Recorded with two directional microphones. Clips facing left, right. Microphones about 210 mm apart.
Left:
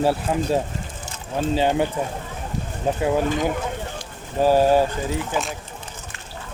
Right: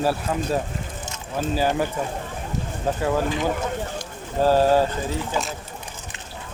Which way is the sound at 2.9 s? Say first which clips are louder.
Left 2 dB; 20° left (ahead or behind).